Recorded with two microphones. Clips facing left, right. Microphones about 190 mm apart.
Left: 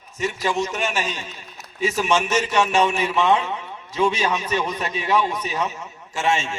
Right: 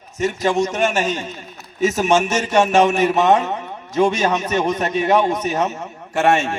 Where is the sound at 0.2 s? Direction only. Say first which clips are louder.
Right 5 dB; 45° right (ahead or behind).